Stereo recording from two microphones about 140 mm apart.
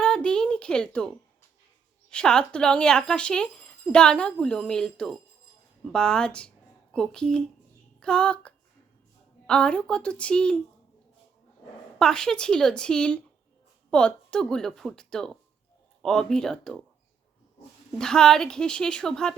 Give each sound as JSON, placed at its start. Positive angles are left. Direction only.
{"t": 0.0, "sound": "a sound", "side_deg": 5}
{"t": 2.0, "sound": "a woman's voice", "side_deg": 5}
{"t": 11.9, "sound": "speech", "side_deg": 5}
{"t": 17.9, "sound": "speech", "side_deg": 5}